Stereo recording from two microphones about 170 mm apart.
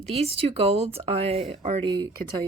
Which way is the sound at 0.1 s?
35° right (ahead or behind).